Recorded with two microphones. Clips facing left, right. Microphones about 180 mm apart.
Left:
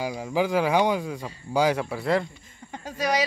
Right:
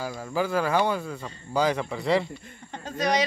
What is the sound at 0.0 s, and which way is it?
Speech, 15° left (ahead or behind).